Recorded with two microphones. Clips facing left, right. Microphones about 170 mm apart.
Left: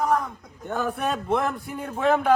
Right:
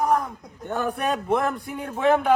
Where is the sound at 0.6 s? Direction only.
Centre (ahead or behind).